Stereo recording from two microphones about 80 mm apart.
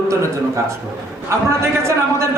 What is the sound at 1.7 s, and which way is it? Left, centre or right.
Speech, right.